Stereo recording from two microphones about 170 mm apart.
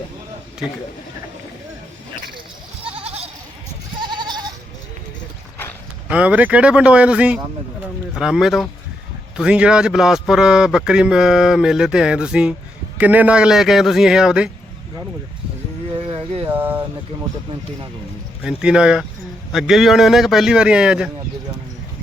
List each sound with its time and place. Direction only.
4.1 s goat: 25° right (ahead or behind)
6.1 s a man's voice: 10° right (ahead or behind)
16.5 s speech: 10° right (ahead or behind)
18.4 s a man's voice: 5° right (ahead or behind)